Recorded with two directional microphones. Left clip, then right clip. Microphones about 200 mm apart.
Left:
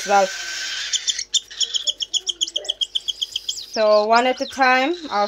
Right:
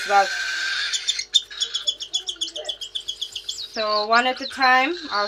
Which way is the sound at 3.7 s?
50° left (ahead or behind).